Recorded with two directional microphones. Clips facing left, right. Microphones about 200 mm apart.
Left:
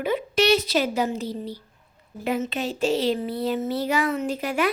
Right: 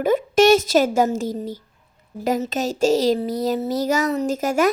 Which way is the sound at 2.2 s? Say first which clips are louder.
Right 4 dB; 40° right (ahead or behind).